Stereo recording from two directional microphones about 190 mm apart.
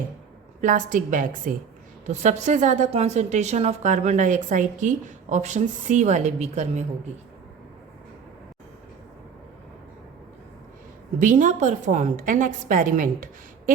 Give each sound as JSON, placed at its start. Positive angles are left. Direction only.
{"t": 0.6, "sound": "a woman's voice", "side_deg": -45}
{"t": 11.2, "sound": "a woman's voice", "side_deg": -45}